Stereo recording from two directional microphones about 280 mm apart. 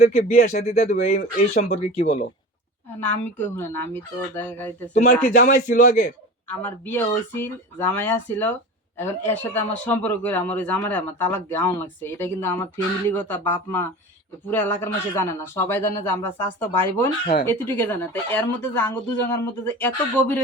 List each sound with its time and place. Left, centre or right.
0.0 s speech: left
3.3 s speech: centre
4.9 s a man's voice: left
6.5 s speech: centre